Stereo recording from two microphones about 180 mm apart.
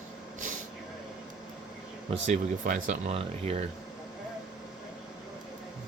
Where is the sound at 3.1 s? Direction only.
35° right (ahead or behind).